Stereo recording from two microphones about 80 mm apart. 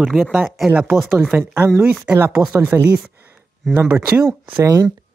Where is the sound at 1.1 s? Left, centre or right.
Right.